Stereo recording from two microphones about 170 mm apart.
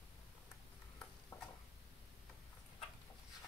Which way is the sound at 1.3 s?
15° left (ahead or behind).